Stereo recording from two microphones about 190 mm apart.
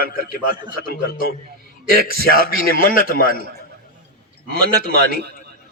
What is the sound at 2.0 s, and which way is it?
Music, 50° left (ahead or behind).